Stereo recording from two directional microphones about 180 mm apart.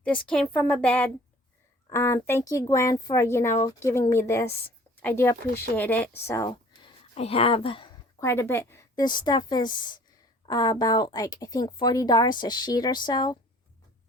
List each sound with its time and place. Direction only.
0.3 s speech: 10° left (ahead or behind)
6.5 s speech: 35° left (ahead or behind)
8.2 s speech: 15° left (ahead or behind)